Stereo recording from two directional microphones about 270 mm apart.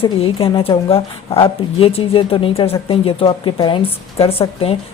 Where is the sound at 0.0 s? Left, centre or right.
Left.